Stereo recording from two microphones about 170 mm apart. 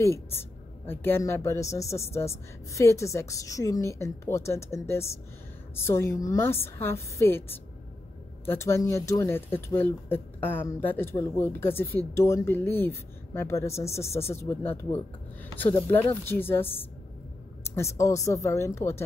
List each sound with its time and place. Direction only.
0.0 s speech: 15° left (ahead or behind)